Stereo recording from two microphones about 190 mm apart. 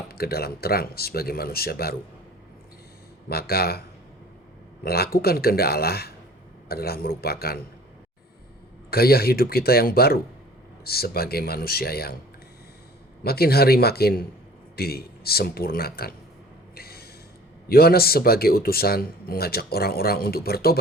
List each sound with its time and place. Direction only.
0.1 s speech: 55° left (ahead or behind)
3.2 s a man's voice: 55° left (ahead or behind)
8.9 s speech: 55° left (ahead or behind)
13.2 s a man's voice: 55° left (ahead or behind)
16.7 s a sound: 55° left (ahead or behind)
17.7 s speech: 55° left (ahead or behind)